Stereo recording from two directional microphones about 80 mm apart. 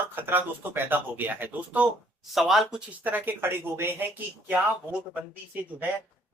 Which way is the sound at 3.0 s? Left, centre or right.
Right.